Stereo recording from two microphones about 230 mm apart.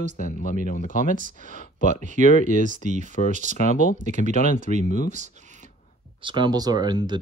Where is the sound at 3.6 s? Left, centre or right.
Left.